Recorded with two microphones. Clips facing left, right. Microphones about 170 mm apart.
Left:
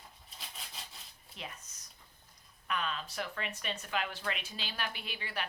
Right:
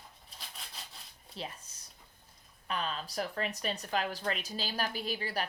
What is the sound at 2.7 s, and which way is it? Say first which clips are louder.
Speech: right 1 dB; 35° right (ahead or behind).